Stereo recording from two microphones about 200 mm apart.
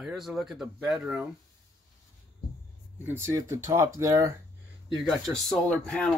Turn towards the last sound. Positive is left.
turn(degrees=5)  # may be behind; listen again after turning